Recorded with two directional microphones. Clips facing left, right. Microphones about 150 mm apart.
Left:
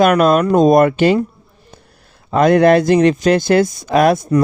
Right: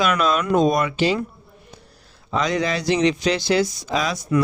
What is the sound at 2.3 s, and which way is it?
Speech, 55° left (ahead or behind).